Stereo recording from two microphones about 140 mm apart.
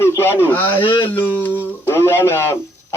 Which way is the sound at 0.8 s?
35° left (ahead or behind).